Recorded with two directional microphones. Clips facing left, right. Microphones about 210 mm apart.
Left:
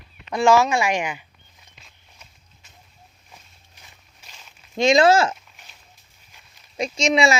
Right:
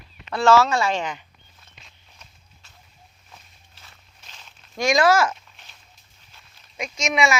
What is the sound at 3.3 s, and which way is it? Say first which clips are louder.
Walk: even; 15° left (ahead or behind).